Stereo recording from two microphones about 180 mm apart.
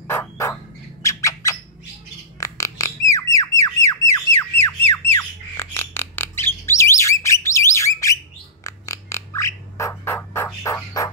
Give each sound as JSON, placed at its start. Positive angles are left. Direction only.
{"t": 0.1, "sound": "turkey", "side_deg": 15}
{"t": 1.0, "sound": "squawk", "side_deg": 15}
{"t": 5.1, "sound": "bird", "side_deg": 10}